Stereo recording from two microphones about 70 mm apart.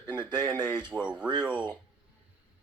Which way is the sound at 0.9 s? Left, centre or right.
Centre.